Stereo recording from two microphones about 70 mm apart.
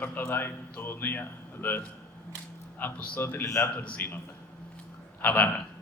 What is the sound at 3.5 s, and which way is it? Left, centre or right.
Speech, left.